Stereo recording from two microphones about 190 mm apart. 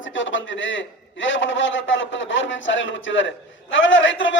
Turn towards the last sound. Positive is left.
turn(degrees=80)